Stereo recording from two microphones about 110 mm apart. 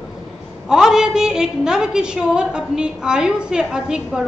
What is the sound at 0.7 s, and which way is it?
A woman's voice, 5° right (ahead or behind).